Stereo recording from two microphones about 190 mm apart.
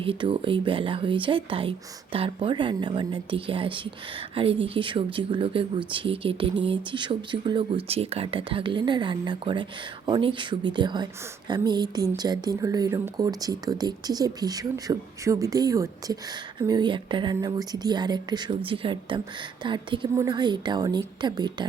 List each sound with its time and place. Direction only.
0.0 s a woman's voice: 30° right (ahead or behind)